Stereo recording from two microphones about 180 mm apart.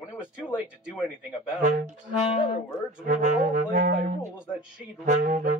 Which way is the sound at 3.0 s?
50° right (ahead or behind).